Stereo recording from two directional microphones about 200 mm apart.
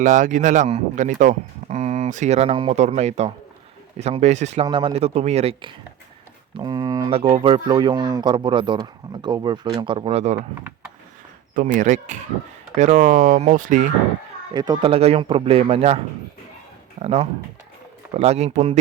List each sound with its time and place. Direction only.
0.0 s speech: 40° right (ahead or behind)
4.6 s speech: 25° right (ahead or behind)
11.5 s speech: 40° right (ahead or behind)
14.5 s speech: 20° right (ahead or behind)